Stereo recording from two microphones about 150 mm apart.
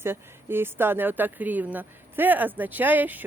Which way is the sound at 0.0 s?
15° right (ahead or behind).